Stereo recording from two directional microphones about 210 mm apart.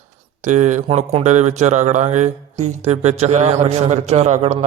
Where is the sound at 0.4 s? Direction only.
35° right (ahead or behind).